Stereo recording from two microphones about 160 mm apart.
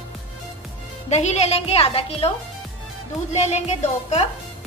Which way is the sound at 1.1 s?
45° left (ahead or behind).